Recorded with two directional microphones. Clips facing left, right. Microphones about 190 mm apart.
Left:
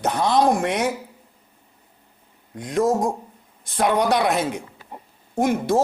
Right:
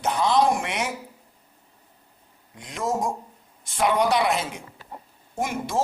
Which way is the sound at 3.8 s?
50° left (ahead or behind).